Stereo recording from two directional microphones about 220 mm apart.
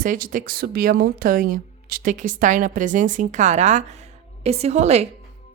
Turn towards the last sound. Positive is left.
turn(degrees=-30)  # may be behind; listen again after turning